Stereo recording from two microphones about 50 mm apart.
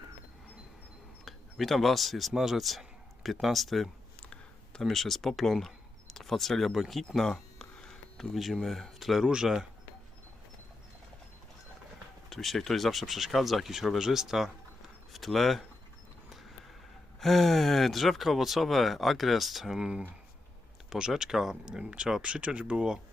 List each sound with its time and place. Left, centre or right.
1.2 s speech: centre
4.2 s a sound: left
4.8 s speech: centre
8.6 s speech: centre
9.2 s speech: centre
12.3 s speech: centre
17.2 s speech: centre
20.9 s speech: centre
21.7 s speech: centre